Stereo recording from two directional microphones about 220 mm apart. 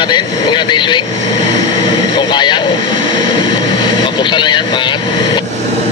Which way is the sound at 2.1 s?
20° left (ahead or behind).